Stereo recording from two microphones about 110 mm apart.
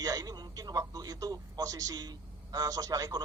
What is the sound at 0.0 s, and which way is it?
A man's voice, 35° right (ahead or behind).